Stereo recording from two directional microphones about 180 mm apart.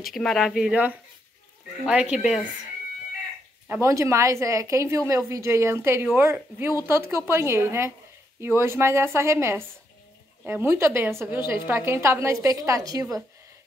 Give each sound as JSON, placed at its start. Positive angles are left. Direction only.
{"t": 0.1, "sound": "speech", "side_deg": 0}
{"t": 3.6, "sound": "a woman's voice", "side_deg": -15}